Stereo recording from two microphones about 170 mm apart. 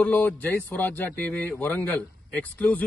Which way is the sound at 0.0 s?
10° left (ahead or behind).